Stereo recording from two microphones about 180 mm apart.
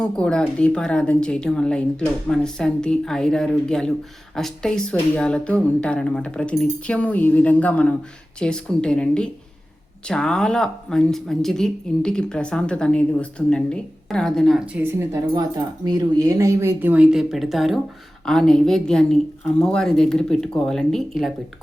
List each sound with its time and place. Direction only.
0.0 s speech: 5° left (ahead or behind)
14.8 s speech: 15° right (ahead or behind)